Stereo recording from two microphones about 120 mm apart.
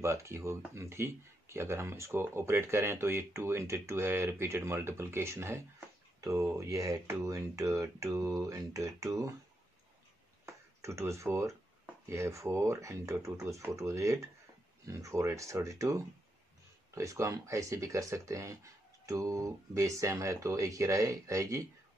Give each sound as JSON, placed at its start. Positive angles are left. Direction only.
{"t": 0.0, "sound": "speech", "side_deg": -25}
{"t": 10.4, "sound": "a sound", "side_deg": -25}
{"t": 12.1, "sound": "speech", "side_deg": -25}